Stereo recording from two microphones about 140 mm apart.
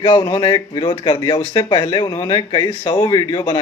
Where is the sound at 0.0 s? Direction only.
30° left (ahead or behind).